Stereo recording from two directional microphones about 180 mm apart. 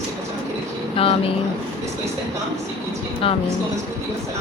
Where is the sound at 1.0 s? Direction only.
30° left (ahead or behind).